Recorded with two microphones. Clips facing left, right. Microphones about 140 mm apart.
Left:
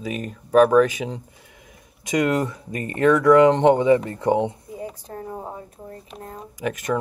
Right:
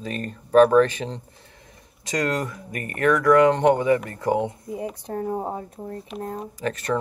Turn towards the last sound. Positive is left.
turn(degrees=15)  # may be behind; listen again after turning